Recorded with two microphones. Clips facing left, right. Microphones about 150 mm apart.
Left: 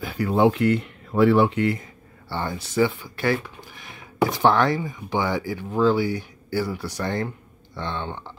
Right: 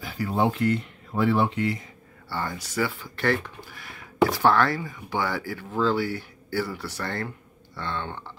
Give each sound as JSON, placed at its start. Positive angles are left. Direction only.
{"t": 0.0, "sound": "speech", "side_deg": 60}
{"t": 2.2, "sound": "speech", "side_deg": 25}
{"t": 3.2, "sound": "speech", "side_deg": 10}